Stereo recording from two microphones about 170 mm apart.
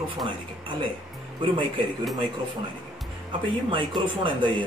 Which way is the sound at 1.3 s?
30° right (ahead or behind).